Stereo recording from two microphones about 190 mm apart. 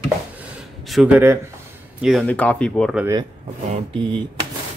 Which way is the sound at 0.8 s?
Centre (ahead or behind).